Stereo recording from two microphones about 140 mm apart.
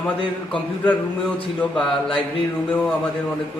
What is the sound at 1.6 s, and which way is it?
Mantra, 5° left (ahead or behind).